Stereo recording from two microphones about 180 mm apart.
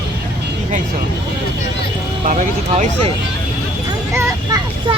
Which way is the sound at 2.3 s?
45° right (ahead or behind).